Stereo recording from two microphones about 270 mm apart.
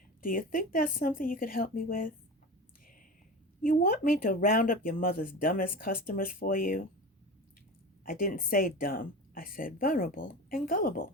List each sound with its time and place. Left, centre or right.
0.2 s speech: left
3.6 s speech: left
8.0 s speech: left